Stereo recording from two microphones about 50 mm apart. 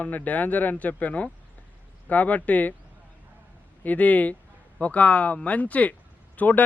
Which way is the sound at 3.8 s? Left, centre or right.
Left.